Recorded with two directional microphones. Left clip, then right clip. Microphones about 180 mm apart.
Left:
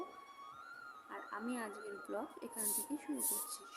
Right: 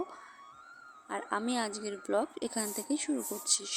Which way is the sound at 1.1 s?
45° right (ahead or behind).